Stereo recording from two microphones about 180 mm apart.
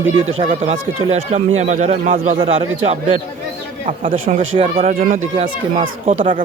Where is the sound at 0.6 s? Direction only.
35° right (ahead or behind).